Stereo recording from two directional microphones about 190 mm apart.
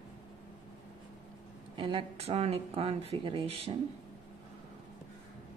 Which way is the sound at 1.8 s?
25° right (ahead or behind).